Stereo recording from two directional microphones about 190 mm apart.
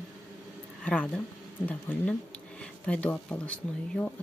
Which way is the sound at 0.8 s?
5° left (ahead or behind).